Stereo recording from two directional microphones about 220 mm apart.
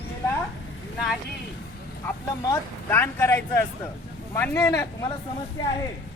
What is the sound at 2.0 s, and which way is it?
Speech, 10° left (ahead or behind).